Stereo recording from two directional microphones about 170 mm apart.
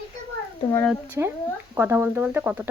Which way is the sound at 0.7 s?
5° left (ahead or behind).